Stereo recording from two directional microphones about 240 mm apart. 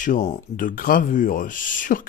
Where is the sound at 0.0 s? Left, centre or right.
Left.